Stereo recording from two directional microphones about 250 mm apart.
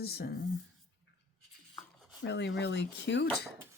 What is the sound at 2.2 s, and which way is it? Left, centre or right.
Speech, left.